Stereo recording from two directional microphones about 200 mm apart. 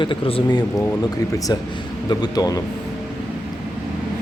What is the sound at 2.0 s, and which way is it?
Speech, 20° left (ahead or behind).